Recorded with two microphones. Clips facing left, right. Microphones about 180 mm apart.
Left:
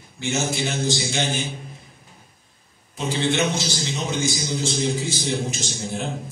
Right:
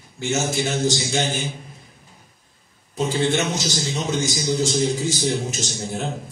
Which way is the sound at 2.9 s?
45° right (ahead or behind).